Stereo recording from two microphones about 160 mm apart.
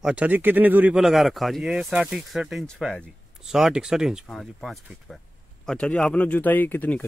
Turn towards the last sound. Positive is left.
turn(degrees=10)  # may be behind; listen again after turning